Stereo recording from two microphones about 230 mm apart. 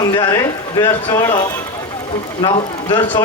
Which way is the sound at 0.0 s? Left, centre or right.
Centre.